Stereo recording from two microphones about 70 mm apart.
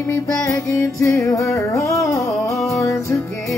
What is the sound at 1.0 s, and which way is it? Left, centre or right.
Music, left.